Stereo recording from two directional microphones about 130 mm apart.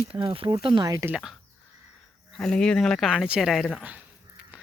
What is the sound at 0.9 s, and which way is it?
Speech, 20° right (ahead or behind).